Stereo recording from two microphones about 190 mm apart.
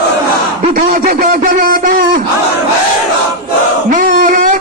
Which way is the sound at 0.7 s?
45° right (ahead or behind).